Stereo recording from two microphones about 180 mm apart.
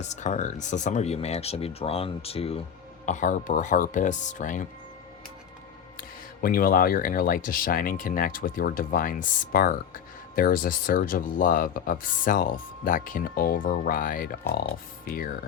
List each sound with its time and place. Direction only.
0.0 s speech: 40° left (ahead or behind)
3.1 s speech: 45° left (ahead or behind)
6.0 s speech: 55° left (ahead or behind)